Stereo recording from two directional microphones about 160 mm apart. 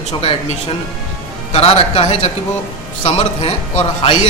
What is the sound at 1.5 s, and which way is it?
A man's voice, 40° left (ahead or behind).